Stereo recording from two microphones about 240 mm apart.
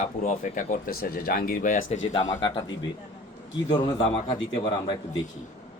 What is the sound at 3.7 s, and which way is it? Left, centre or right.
Speech, centre.